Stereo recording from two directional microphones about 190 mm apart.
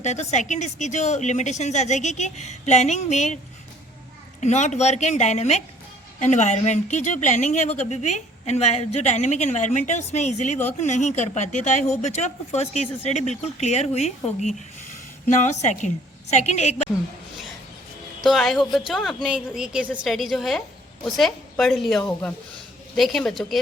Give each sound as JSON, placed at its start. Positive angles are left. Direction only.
{"t": 0.0, "sound": "a woman's voice", "side_deg": 35}
{"t": 4.4, "sound": "a woman's voice", "side_deg": 40}
{"t": 15.6, "sound": "a woman's voice", "side_deg": 40}
{"t": 18.2, "sound": "a woman's voice", "side_deg": 0}